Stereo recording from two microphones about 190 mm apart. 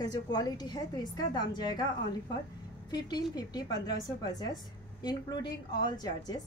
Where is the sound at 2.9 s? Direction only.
20° left (ahead or behind).